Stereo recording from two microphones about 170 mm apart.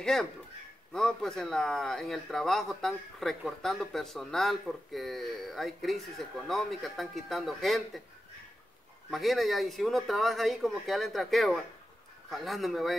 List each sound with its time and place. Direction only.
0.0 s a man's voice: 5° left (ahead or behind)
9.1 s a man's voice: centre (ahead or behind)